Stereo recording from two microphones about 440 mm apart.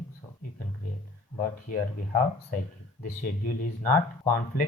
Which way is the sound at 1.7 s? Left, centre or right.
Centre.